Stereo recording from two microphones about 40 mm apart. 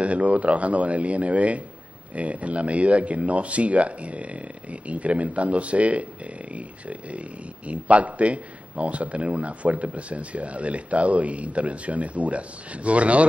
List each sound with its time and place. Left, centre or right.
0.0 s a man's voice: right